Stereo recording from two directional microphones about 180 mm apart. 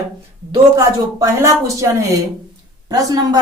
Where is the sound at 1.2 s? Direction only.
15° right (ahead or behind).